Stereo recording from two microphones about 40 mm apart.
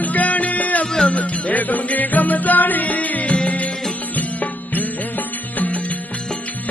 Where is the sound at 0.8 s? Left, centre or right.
Centre.